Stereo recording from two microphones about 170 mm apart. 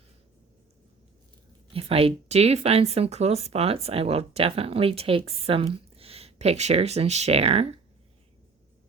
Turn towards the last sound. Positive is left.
turn(degrees=-35)  # may be behind; listen again after turning